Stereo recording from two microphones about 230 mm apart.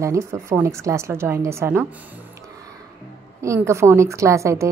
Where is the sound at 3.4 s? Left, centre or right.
Centre.